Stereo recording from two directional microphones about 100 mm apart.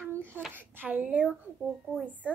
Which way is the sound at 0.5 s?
20° right (ahead or behind).